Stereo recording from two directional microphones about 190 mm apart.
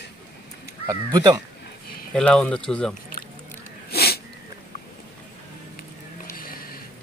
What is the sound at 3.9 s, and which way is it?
Wheeze, 55° left (ahead or behind).